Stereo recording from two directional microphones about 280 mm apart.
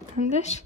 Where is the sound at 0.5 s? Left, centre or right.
Left.